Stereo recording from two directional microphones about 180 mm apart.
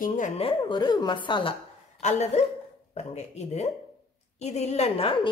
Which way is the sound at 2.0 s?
40° left (ahead or behind).